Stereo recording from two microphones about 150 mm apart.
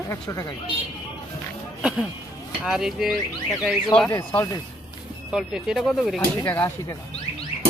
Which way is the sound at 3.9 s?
10° left (ahead or behind).